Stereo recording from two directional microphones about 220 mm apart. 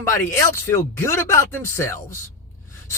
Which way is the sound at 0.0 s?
10° left (ahead or behind).